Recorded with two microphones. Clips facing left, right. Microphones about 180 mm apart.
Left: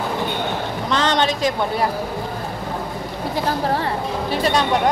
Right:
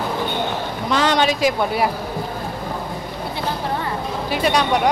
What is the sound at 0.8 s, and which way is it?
A man's voice, 10° right (ahead or behind).